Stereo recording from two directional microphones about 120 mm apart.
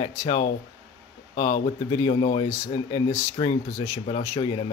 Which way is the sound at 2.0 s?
50° left (ahead or behind).